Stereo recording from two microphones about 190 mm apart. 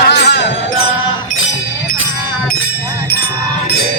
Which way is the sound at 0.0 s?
65° left (ahead or behind).